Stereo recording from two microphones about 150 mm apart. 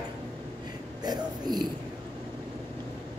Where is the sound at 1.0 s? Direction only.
25° right (ahead or behind).